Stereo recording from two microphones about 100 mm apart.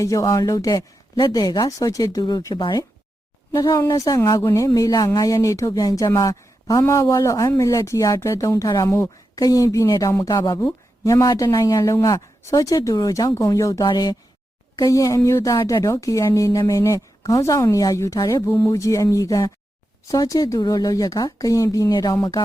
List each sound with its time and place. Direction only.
0.0 s a woman's voice: 35° left (ahead or behind)
9.4 s speech: 35° left (ahead or behind)